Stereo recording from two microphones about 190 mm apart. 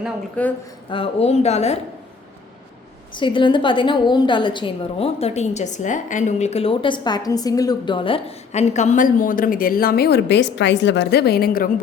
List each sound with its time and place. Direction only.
0.4 s a woman's voice: 5° left (ahead or behind)
0.9 s a woman's voice: 30° left (ahead or behind)
3.2 s a woman's voice: 25° left (ahead or behind); by 11.7 s 50° left (ahead or behind)